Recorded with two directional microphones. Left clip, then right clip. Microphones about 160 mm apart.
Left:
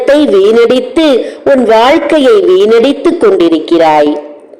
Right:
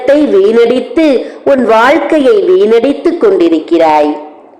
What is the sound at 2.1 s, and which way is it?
A man's voice, 30° left (ahead or behind).